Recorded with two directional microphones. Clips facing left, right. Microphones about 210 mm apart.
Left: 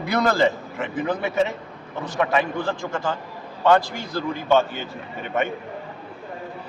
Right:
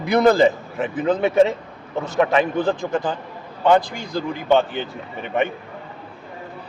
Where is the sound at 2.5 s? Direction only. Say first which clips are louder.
Right 5 dB; 20° right (ahead or behind).